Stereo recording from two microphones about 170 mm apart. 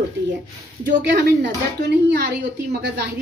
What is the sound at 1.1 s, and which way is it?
A woman's voice, 85° right.